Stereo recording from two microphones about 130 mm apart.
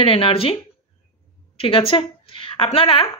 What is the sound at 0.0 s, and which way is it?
Speech, 45° left (ahead or behind).